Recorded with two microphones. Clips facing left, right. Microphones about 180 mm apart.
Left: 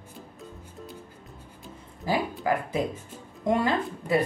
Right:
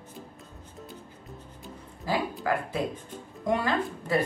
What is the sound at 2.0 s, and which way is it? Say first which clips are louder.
Speech: left 2 dB; 20° left (ahead or behind).